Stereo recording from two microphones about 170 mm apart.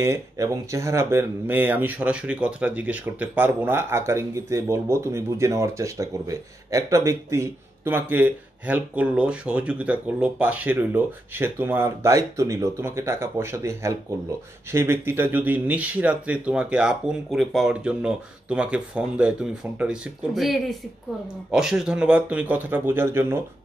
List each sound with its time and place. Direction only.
0.0 s speech: 15° right (ahead or behind)